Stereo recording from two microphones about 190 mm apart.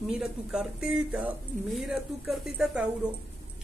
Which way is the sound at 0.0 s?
5° right (ahead or behind).